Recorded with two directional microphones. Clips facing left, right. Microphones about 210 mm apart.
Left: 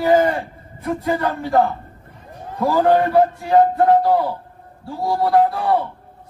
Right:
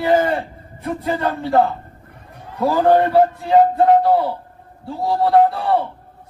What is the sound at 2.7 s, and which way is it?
Music, 20° right (ahead or behind).